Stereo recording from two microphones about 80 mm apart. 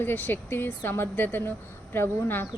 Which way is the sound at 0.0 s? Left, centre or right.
Left.